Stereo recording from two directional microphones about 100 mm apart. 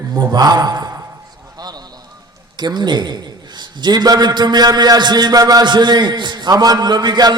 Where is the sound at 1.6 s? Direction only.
40° right (ahead or behind).